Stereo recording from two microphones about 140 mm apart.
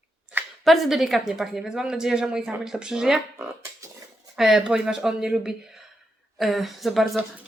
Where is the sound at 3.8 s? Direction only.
20° right (ahead or behind).